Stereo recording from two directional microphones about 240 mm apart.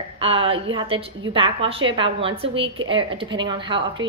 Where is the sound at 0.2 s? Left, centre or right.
Right.